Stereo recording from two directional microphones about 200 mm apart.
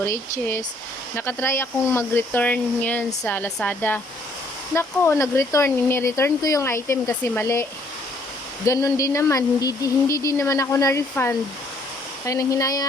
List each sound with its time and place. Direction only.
0.0 s speech: 10° left (ahead or behind)